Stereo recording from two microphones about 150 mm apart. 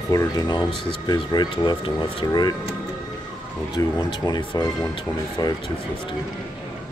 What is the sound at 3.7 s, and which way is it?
Speech, 25° left (ahead or behind).